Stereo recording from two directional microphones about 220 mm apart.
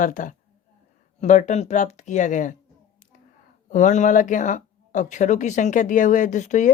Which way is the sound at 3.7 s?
35° left (ahead or behind).